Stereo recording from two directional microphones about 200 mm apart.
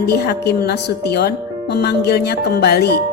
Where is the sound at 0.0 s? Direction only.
55° left (ahead or behind).